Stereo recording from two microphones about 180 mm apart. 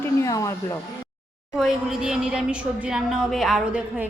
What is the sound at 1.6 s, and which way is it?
A woman's voice, 5° right (ahead or behind).